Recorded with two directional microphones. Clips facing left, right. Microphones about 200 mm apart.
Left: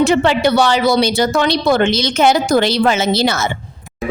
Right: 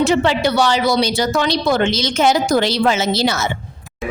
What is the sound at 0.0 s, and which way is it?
Speech, 55° left (ahead or behind).